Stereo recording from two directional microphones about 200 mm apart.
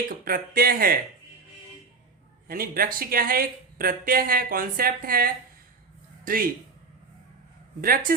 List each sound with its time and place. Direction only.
0.3 s speech: 45° right (ahead or behind)
2.5 s a man's voice: 45° right (ahead or behind)
7.8 s speech: 45° right (ahead or behind)